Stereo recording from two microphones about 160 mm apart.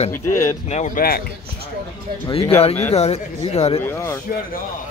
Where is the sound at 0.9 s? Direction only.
70° left (ahead or behind).